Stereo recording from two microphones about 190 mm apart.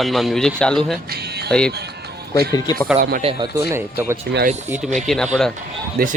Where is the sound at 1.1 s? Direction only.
60° right (ahead or behind).